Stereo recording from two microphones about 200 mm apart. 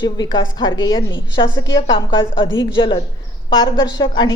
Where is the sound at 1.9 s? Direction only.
20° left (ahead or behind).